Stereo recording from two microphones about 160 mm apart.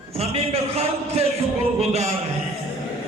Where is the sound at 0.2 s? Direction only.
40° right (ahead or behind).